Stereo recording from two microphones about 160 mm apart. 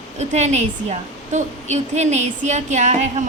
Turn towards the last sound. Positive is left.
turn(degrees=-50)  # may be behind; listen again after turning